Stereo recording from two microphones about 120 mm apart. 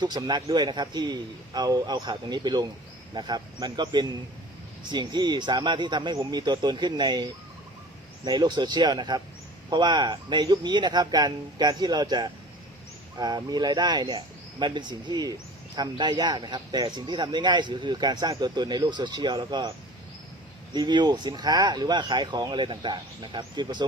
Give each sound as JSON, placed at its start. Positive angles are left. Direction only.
{"t": 0.0, "sound": "speech", "side_deg": -35}
{"t": 20.7, "sound": "speech", "side_deg": -35}